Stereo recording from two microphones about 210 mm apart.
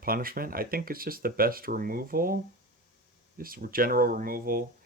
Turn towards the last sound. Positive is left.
turn(degrees=-45)  # may be behind; listen again after turning